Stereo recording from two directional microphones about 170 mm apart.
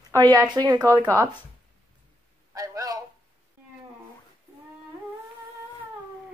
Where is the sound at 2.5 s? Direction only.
20° right (ahead or behind).